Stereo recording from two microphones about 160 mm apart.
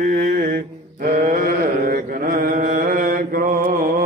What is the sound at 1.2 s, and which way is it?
Chant, 60° right (ahead or behind).